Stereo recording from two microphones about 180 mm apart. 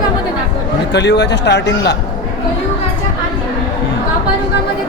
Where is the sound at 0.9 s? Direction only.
70° left (ahead or behind).